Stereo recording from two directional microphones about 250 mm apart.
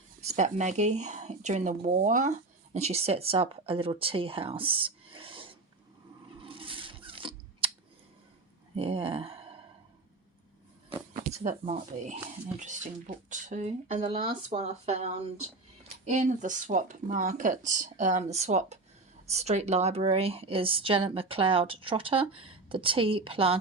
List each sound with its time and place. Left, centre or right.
0.2 s speech: right
6.4 s rub: right
8.7 s speech: right
11.1 s speech: right